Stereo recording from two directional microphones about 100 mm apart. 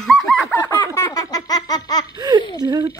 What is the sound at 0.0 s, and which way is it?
Fowl, 5° left (ahead or behind).